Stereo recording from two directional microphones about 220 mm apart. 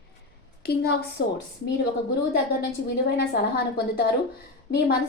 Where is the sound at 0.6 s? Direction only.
45° left (ahead or behind).